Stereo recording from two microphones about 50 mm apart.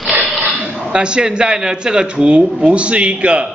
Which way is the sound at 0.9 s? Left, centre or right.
Centre.